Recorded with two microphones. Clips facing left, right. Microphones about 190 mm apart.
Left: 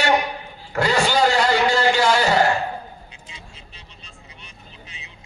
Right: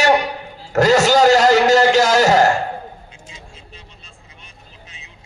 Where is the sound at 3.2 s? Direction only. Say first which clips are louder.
Right 3 dB; 45° right (ahead or behind).